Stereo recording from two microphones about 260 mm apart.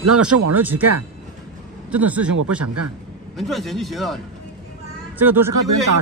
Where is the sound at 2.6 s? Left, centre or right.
Right.